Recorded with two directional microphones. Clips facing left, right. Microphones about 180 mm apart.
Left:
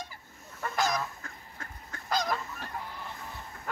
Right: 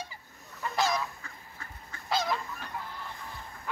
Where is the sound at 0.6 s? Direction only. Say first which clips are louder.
Right 1 dB; 50° left (ahead or behind).